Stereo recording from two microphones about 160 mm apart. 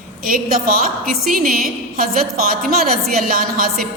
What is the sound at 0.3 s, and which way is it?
A woman's voice, 65° right (ahead or behind).